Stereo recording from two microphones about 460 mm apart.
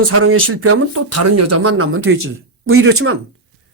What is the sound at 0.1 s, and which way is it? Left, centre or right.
Speech, right.